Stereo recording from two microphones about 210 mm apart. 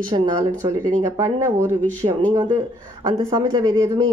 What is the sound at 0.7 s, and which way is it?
Speech, 15° right (ahead or behind).